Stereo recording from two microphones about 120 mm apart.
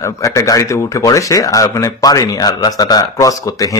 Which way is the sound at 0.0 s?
25° left (ahead or behind).